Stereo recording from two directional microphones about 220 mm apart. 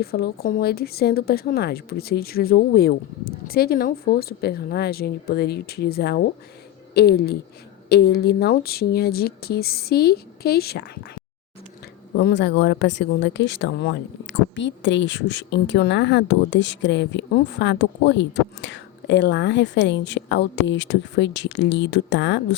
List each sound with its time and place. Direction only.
0.0 s speech: 45° left (ahead or behind)